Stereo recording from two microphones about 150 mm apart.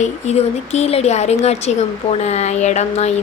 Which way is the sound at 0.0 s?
45° left (ahead or behind).